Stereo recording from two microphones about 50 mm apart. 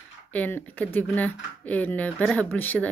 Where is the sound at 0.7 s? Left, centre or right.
Left.